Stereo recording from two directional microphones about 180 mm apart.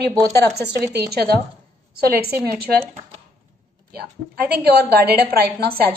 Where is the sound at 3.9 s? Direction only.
60° right (ahead or behind).